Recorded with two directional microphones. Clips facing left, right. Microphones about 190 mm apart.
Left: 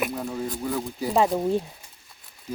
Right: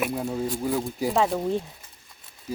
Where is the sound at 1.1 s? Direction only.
15° left (ahead or behind).